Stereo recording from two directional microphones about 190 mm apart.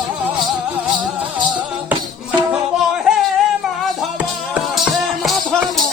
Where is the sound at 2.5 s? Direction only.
5° right (ahead or behind).